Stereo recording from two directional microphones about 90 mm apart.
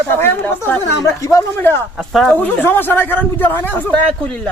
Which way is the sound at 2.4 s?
20° left (ahead or behind).